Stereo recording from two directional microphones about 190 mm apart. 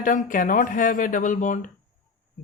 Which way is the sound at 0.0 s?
45° left (ahead or behind).